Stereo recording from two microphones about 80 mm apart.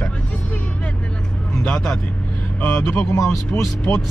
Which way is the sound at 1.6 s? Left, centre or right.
Centre.